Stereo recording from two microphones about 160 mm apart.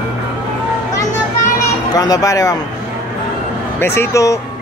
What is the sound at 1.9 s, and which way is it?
Speech, 25° left (ahead or behind).